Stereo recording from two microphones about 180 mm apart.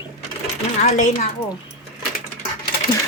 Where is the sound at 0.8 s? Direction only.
40° left (ahead or behind).